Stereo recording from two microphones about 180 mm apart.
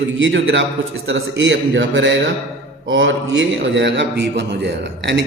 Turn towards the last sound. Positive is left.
turn(degrees=-75)  # may be behind; listen again after turning